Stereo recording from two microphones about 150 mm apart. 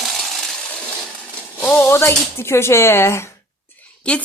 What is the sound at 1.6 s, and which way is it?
A woman's voice, 15° left (ahead or behind).